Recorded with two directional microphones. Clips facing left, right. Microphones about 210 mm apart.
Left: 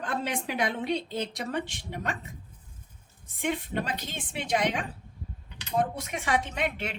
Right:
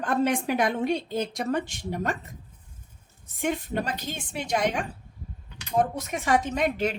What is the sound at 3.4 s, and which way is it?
A woman's voice, 45° right (ahead or behind).